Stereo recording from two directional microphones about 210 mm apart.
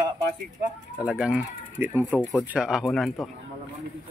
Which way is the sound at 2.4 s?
5° right (ahead or behind).